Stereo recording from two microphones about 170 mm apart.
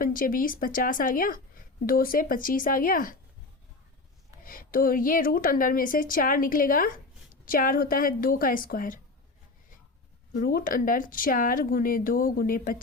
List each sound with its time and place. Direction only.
0.0 s a woman's voice: 55° left (ahead or behind)
4.4 s a woman's voice: 55° left (ahead or behind)
10.4 s a woman's voice: 55° left (ahead or behind)